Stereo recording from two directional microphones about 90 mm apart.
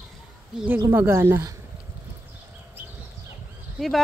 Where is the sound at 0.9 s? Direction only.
30° right (ahead or behind).